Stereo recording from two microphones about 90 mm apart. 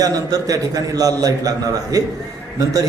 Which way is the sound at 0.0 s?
45° right (ahead or behind).